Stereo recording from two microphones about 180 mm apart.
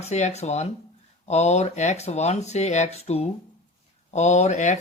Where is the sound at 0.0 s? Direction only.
40° left (ahead or behind).